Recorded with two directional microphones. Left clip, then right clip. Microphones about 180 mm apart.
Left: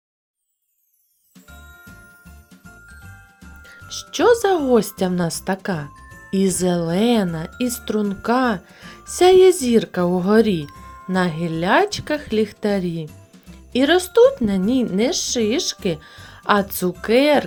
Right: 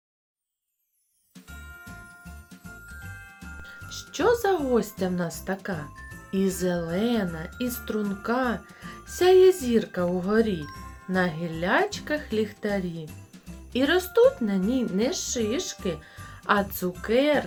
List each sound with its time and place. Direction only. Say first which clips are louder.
3.8 s a woman's voice: left 8 dB; 40° left (ahead or behind)